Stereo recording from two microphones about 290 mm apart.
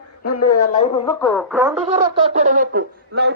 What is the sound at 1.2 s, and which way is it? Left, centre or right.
Music, centre.